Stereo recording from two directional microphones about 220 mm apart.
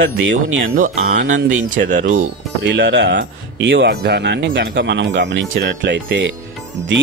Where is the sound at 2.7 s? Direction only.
55° right (ahead or behind).